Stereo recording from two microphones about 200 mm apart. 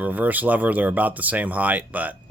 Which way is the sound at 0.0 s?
10° right (ahead or behind).